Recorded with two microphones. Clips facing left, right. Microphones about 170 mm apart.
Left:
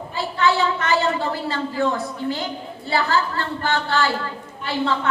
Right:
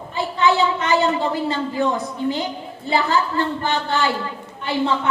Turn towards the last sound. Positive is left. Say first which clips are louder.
# right 2 dB
turn(degrees=-20)  # may be behind; listen again after turning